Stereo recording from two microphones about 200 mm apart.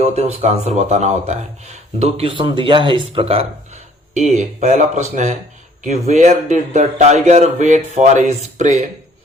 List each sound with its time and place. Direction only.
0.0 s speech: 35° right (ahead or behind)